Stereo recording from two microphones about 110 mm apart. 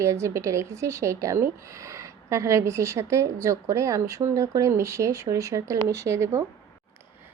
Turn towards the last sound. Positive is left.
turn(degrees=-25)  # may be behind; listen again after turning